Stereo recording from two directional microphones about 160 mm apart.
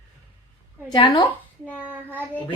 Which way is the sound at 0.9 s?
30° left (ahead or behind).